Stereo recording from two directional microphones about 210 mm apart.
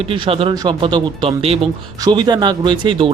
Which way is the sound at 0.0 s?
25° right (ahead or behind).